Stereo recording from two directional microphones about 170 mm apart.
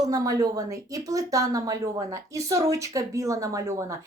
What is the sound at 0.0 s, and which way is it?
Speech, 20° right (ahead or behind).